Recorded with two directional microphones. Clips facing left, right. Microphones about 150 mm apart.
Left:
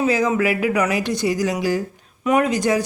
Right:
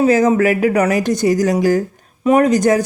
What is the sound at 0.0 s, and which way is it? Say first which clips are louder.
Speech: right 6 dB; 45° right (ahead or behind).